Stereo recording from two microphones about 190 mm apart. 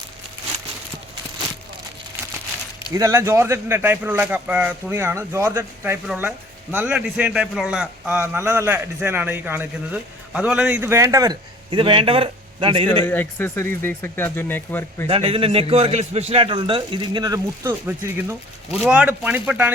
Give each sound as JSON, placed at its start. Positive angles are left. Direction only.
{"t": 2.9, "sound": "a man's voice", "side_deg": -15}
{"t": 13.1, "sound": "speech", "side_deg": 10}
{"t": 15.0, "sound": "a man's voice", "side_deg": -30}